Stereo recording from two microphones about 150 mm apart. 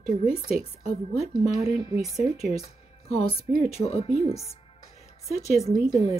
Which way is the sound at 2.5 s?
40° left (ahead or behind).